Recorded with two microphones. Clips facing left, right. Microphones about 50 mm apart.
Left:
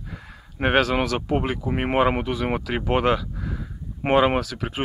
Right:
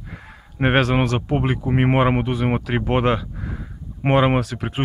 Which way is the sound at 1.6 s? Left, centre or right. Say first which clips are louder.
Right 3 dB; centre.